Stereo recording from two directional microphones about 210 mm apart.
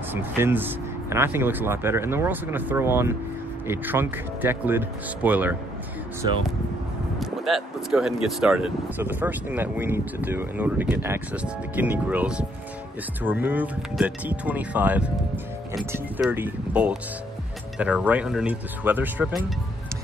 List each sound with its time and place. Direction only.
0.1 s speech: 10° right (ahead or behind)
7.2 s speech: centre (ahead or behind)